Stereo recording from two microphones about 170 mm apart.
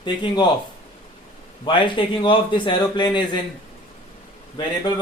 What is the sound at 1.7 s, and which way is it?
A man's voice, 30° left (ahead or behind).